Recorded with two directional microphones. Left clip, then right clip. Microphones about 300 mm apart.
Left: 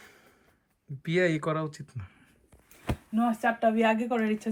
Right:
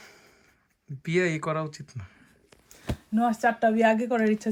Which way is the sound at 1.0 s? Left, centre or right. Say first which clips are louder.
Even; centre.